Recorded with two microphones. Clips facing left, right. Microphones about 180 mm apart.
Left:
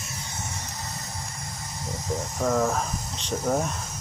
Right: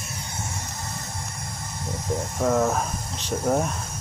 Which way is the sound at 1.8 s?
25° right (ahead or behind).